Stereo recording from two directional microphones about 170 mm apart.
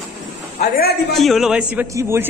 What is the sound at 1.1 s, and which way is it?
A man's voice, centre (ahead or behind).